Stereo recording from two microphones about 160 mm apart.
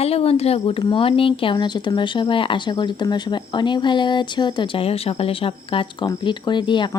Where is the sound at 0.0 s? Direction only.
40° left (ahead or behind).